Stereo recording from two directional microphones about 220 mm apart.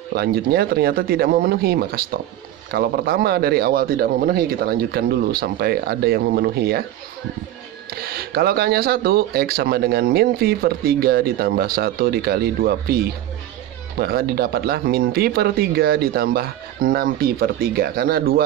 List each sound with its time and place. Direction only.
0.1 s speech: 45° right (ahead or behind)
7.9 s speech: 45° right (ahead or behind)